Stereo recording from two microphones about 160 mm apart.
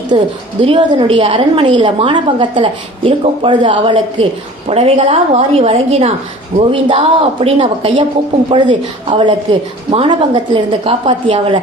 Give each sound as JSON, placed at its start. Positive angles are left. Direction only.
{"t": 0.1, "sound": "a woman's voice", "side_deg": -35}